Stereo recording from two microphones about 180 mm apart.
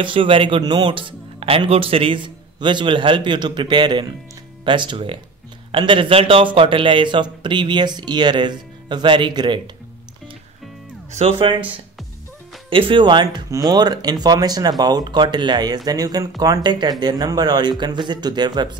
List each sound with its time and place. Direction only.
0.0 s speech: 30° right (ahead or behind)
11.1 s speech: 35° right (ahead or behind)
12.6 s speech: 30° right (ahead or behind)